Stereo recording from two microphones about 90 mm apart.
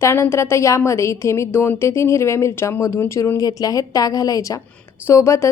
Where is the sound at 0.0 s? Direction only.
30° left (ahead or behind).